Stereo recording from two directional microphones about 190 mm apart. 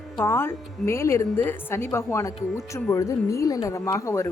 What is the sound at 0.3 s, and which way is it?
A woman's voice, 10° left (ahead or behind).